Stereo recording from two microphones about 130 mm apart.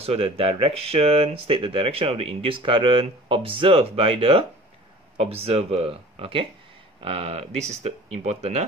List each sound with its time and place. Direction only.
0.0 s speech: 50° right (ahead or behind)